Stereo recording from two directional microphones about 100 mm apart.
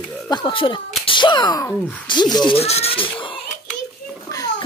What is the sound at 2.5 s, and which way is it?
Speech, 90° left.